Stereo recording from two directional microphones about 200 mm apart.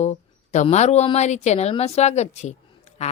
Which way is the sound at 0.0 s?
35° left (ahead or behind).